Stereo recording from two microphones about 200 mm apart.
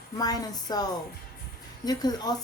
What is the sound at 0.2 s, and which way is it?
A woman's voice, 20° left (ahead or behind).